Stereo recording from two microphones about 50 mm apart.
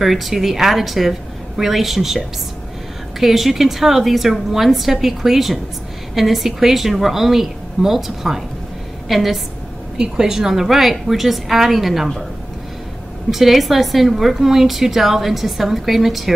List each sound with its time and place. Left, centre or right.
0.0 s a woman's voice: centre
13.3 s a woman's voice: centre